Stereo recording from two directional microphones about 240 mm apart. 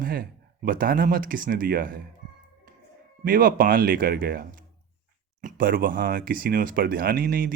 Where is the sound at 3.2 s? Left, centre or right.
Right.